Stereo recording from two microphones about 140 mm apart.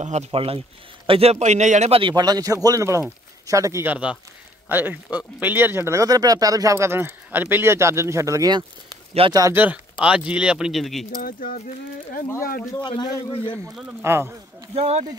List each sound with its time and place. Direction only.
0.0 s a man's voice: 55° right (ahead or behind)
2.0 s speech: 30° right (ahead or behind)
9.6 s speech: 10° right (ahead or behind)
11.1 s speech: 90° left; by 12.3 s 70° left (ahead or behind)
12.8 s a man's voice: 35° left (ahead or behind)
14.0 s speech: 15° right (ahead or behind)
14.7 s a man's voice: 45° right (ahead or behind)